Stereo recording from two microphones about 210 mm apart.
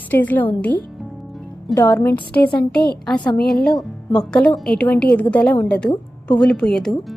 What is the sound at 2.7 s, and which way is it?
Speech, 50° left (ahead or behind).